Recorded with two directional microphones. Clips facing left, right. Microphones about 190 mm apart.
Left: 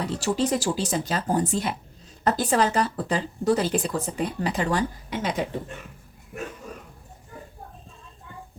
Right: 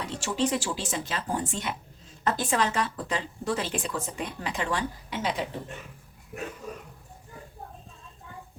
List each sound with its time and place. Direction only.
0.0 s a woman's voice: 35° left (ahead or behind)